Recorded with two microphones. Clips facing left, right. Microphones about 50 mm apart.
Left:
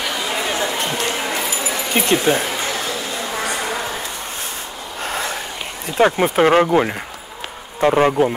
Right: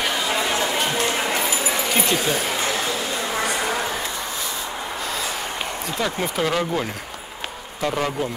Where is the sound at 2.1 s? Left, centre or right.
Left.